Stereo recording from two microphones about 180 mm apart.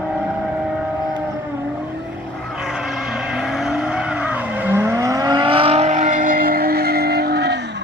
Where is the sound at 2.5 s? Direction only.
5° right (ahead or behind).